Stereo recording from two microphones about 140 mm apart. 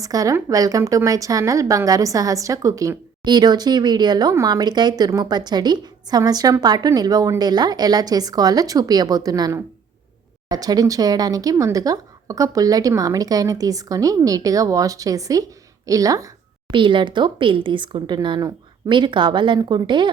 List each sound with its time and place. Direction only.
0.0 s a woman's voice: 25° right (ahead or behind)
16.7 s speech: 35° right (ahead or behind)